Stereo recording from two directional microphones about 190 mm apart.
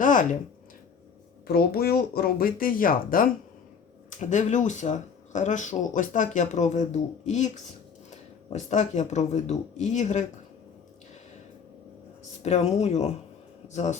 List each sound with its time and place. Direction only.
0.0 s a sound: 45° left (ahead or behind)
1.5 s speech: 55° left (ahead or behind)
12.4 s speech: 35° left (ahead or behind)